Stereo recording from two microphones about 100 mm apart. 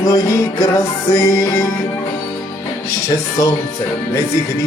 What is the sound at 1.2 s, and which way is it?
Music, 30° left (ahead or behind).